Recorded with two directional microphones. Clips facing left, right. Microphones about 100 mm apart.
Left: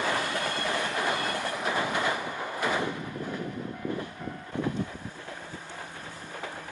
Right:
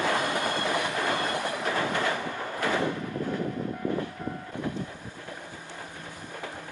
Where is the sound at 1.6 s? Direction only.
15° left (ahead or behind).